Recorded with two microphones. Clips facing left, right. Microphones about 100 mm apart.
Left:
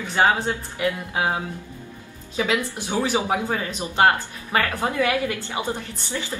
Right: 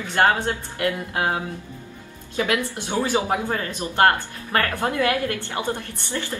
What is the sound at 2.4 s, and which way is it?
Speech, 15° left (ahead or behind).